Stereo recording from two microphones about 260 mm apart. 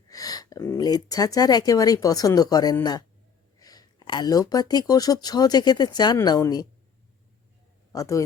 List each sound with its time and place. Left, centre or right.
0.1 s speech: centre
7.9 s speech: centre